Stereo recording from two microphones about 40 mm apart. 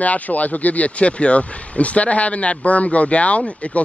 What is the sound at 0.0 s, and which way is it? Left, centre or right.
Speech, left.